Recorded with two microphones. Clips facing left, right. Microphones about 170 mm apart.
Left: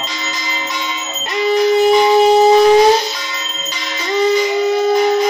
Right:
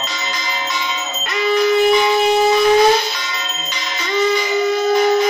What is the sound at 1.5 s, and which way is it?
Wind instrument, 35° left (ahead or behind).